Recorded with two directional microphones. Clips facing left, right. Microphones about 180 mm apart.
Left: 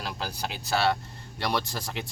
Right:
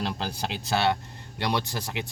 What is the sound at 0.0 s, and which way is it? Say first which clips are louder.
Speech: right 3 dB; 25° right (ahead or behind).